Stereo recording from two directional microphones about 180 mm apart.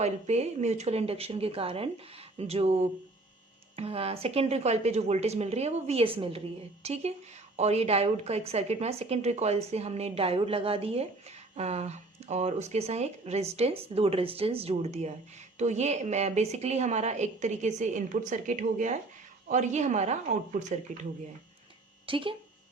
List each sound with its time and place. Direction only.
0.0 s a woman's voice: 40° right (ahead or behind)
22.0 s speech: 30° right (ahead or behind)